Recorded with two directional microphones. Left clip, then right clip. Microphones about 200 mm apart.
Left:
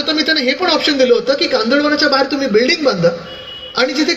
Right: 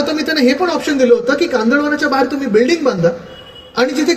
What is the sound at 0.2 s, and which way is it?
Speech, 65° right (ahead or behind).